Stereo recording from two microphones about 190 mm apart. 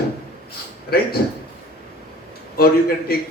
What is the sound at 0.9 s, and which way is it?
Speech, 55° left (ahead or behind).